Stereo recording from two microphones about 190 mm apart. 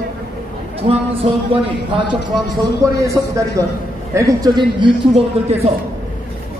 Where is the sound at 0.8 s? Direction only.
30° right (ahead or behind).